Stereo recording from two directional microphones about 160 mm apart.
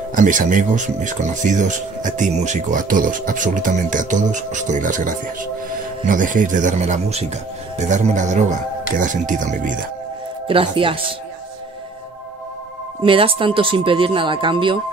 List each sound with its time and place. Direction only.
0.1 s speech: 55° right (ahead or behind)
10.5 s speech: 35° right (ahead or behind)
13.0 s speech: 35° right (ahead or behind)